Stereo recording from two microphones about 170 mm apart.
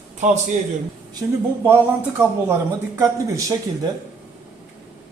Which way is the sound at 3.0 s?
20° right (ahead or behind).